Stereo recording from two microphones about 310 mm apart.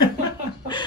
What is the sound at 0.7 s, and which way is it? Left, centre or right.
Speech, centre.